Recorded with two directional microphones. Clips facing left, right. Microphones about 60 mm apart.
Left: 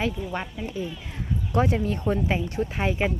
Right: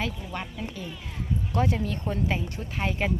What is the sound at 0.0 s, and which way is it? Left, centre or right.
Speech, centre.